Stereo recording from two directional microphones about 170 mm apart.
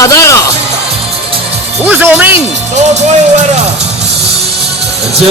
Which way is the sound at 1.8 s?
10° right (ahead or behind).